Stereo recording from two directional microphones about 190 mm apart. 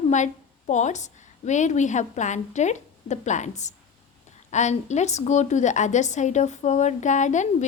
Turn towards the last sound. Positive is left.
turn(degrees=40)  # may be behind; listen again after turning